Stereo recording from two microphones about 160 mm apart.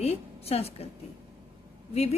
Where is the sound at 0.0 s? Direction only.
40° left (ahead or behind).